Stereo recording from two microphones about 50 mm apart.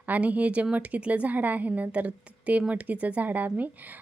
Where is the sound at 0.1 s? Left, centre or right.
Right.